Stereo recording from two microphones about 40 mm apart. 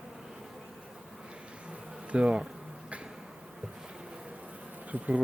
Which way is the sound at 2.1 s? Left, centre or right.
Right.